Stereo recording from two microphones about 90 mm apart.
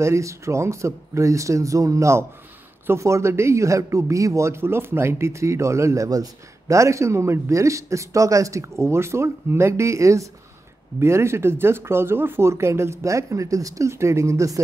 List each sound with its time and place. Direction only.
0.0 s speech: 35° right (ahead or behind)